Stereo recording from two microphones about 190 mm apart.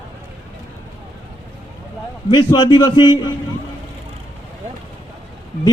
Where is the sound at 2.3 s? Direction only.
25° left (ahead or behind).